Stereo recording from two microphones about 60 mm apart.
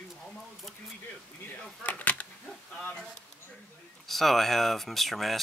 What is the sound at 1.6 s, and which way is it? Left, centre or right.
Speech, left.